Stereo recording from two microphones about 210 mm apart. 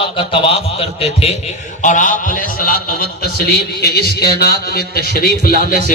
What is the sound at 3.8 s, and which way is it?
A man's voice, 50° left (ahead or behind).